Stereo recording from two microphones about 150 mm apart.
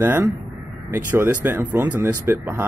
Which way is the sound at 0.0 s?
15° right (ahead or behind).